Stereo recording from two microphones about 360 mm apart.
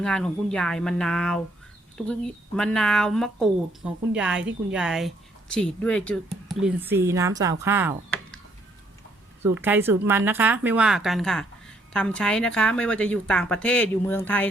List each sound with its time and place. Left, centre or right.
0.0 s speech: centre
9.4 s speech: centre